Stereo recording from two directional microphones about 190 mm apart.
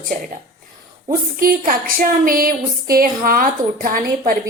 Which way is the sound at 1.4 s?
50° right (ahead or behind).